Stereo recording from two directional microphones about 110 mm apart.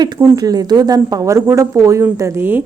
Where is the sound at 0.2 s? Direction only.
35° right (ahead or behind).